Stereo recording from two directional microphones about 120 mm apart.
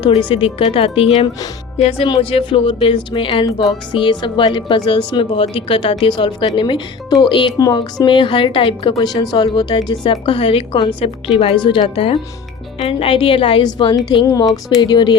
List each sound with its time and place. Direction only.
0.1 s speech: 50° left (ahead or behind)
8.9 s speech: 35° left (ahead or behind)